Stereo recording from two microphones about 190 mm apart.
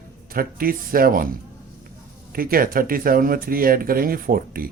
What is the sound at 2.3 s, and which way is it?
Speech, 50° right (ahead or behind).